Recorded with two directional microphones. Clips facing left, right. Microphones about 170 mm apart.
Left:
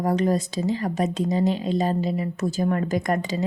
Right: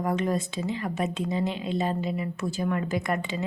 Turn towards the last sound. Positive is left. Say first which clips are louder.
# left 4 dB
turn(degrees=40)  # may be behind; listen again after turning